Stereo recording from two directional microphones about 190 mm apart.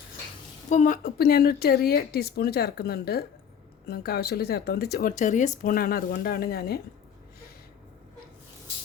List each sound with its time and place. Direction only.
0.7 s speech: 40° left (ahead or behind)